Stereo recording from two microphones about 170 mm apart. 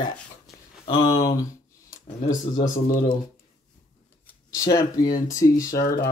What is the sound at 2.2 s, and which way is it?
Speech, 50° left (ahead or behind).